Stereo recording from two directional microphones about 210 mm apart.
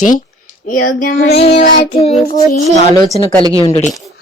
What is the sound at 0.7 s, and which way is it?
Speech, 40° left (ahead or behind).